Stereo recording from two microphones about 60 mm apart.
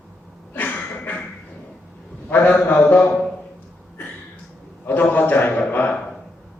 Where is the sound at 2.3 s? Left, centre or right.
Left.